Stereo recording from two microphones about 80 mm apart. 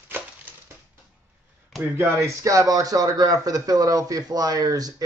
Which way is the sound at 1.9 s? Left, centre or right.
Right.